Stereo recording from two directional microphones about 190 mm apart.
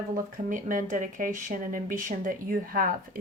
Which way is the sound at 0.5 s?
45° right (ahead or behind).